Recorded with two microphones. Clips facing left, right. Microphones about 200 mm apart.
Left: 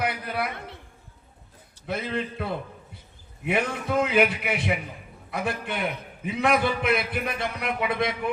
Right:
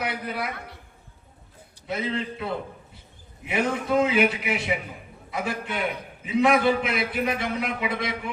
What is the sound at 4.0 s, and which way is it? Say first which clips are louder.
A man's voice: left 2 dB; 60° left (ahead or behind).